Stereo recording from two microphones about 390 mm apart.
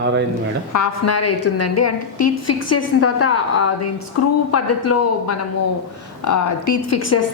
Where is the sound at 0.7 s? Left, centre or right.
Left.